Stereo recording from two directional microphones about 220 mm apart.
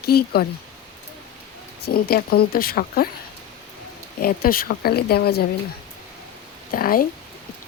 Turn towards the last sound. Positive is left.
turn(degrees=40)  # may be behind; listen again after turning